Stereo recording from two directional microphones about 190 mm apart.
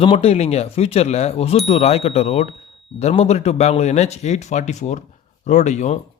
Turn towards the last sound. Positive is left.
turn(degrees=40)  # may be behind; listen again after turning